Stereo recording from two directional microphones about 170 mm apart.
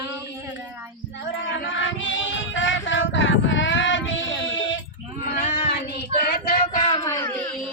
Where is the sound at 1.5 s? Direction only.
90° left.